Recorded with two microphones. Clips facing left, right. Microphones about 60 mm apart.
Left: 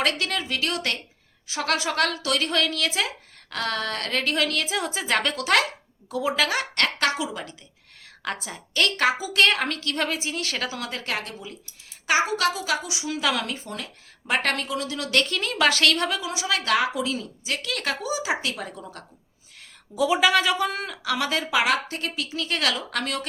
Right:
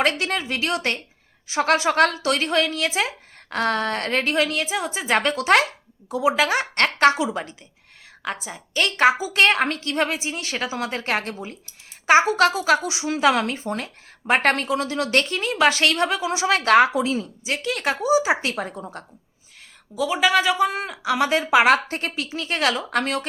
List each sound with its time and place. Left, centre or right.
0.0 s a woman's voice: right; by 5.0 s centre
5.0 s a woman's voice: right
8.4 s speech: centre
8.8 s a woman's voice: right
20.0 s speech: centre; by 21.6 s right
21.6 s a woman's voice: right